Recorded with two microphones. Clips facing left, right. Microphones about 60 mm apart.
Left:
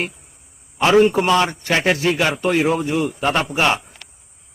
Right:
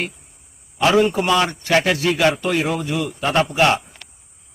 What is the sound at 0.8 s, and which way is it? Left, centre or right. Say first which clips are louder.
Speech: left 2 dB; left.